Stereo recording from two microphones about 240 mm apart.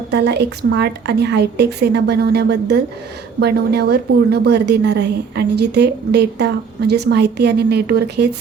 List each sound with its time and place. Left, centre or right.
0.1 s a woman's voice: right